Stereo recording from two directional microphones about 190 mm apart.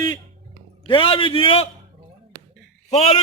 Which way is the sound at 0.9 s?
25° left (ahead or behind).